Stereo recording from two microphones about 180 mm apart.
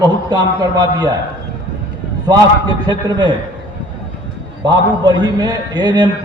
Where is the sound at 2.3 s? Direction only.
25° right (ahead or behind).